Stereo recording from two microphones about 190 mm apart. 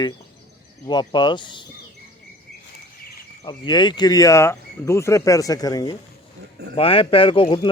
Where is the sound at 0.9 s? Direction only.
25° left (ahead or behind).